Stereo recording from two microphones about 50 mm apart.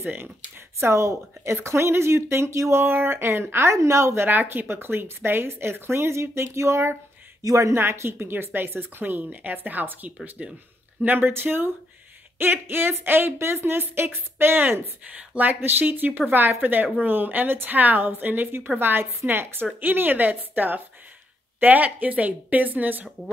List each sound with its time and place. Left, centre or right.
0.0 s a woman's voice: right
0.7 s speech: right
2.8 s a woman's voice: right
3.7 s speech: right
4.3 s speech: right
7.7 s a woman's voice: right
15.0 s a woman's voice: right